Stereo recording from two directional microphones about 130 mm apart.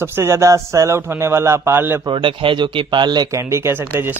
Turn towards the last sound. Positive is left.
turn(degrees=-15)  # may be behind; listen again after turning